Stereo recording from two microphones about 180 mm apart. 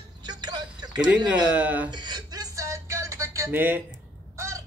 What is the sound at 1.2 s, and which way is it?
Speech, 10° right (ahead or behind).